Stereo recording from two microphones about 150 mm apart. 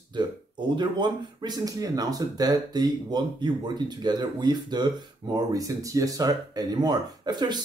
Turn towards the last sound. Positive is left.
turn(degrees=-30)  # may be behind; listen again after turning